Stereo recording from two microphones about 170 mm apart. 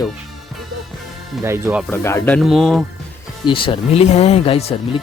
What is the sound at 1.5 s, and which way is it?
Speech, 15° right (ahead or behind).